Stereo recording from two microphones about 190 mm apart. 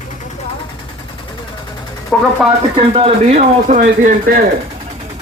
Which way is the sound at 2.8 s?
30° right (ahead or behind).